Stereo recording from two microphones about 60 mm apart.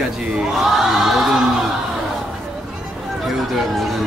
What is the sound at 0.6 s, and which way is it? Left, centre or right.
Choir, centre.